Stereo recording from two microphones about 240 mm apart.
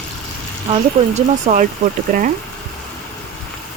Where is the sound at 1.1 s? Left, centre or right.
Right.